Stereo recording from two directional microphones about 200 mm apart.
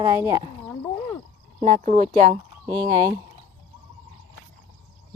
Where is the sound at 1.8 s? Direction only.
35° right (ahead or behind).